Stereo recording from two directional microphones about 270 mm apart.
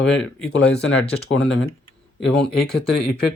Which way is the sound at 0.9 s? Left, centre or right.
Left.